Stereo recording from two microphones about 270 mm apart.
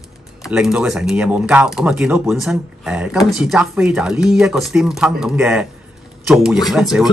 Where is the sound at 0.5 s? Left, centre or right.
Centre.